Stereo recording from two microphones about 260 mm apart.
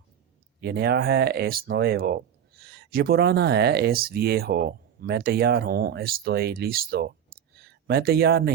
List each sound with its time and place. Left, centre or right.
0.6 s speech: right